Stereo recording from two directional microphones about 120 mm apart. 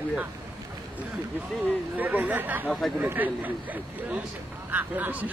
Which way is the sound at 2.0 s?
15° right (ahead or behind).